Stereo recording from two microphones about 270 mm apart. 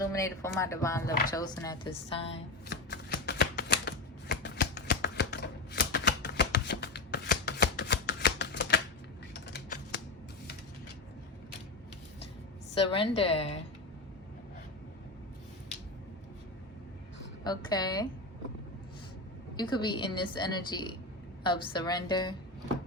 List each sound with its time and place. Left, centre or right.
0.0 s a woman's voice: centre
2.3 s shuffling cards: left
9.3 s a sound: left
12.7 s a woman's voice: centre
17.4 s a woman's voice: centre
19.5 s a woman's voice: centre